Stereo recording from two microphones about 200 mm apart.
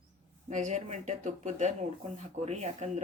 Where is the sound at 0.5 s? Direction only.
35° right (ahead or behind).